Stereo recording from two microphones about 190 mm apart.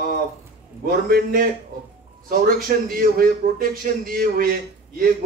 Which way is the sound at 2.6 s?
50° right (ahead or behind).